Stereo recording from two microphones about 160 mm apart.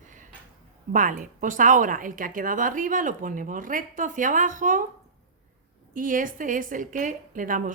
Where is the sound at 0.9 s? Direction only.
55° right (ahead or behind).